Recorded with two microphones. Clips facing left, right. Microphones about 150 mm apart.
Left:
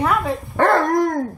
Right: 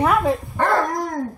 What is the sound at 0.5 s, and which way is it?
Dog, 65° left (ahead or behind).